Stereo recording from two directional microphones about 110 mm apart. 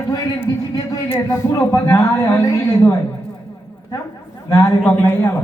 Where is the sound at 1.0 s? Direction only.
25° left (ahead or behind).